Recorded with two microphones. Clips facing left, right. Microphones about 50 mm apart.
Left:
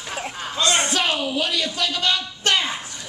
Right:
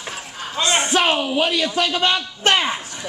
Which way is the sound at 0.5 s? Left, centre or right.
Right.